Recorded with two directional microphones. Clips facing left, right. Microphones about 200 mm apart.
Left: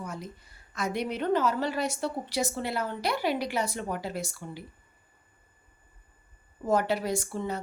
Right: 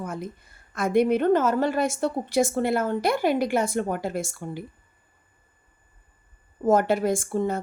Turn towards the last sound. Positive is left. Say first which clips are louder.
# right 6 dB
turn(degrees=-50)  # may be behind; listen again after turning